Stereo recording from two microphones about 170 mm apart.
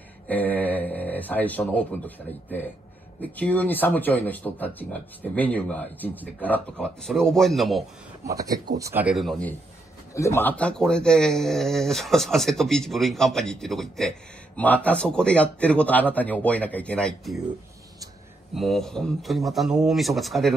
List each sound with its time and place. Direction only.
0.3 s speech: 10° left (ahead or behind)
8.3 s speech: 20° right (ahead or behind)
9.0 s speech: centre (ahead or behind)
10.1 s speech: 15° left (ahead or behind)
18.5 s speech: centre (ahead or behind)